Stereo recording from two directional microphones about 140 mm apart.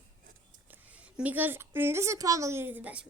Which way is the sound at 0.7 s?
10° right (ahead or behind).